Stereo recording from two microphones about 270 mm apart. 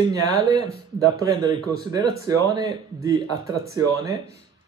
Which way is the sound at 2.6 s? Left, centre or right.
Centre.